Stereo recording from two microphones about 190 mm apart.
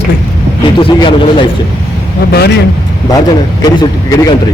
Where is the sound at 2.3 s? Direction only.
60° left (ahead or behind).